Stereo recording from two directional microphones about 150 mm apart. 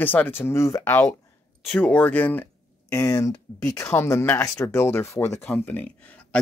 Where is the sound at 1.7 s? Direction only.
10° left (ahead or behind).